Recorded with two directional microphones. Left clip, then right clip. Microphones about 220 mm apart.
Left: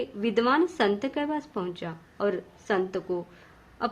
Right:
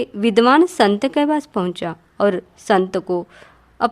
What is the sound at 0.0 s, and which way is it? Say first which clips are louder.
A woman's voice: right 11 dB; 50° right (ahead or behind).